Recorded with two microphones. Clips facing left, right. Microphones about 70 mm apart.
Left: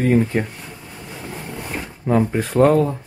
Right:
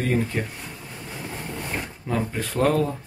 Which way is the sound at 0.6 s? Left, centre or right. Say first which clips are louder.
Left 1 dB; centre.